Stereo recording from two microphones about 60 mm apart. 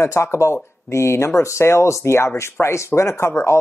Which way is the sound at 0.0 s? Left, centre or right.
Left.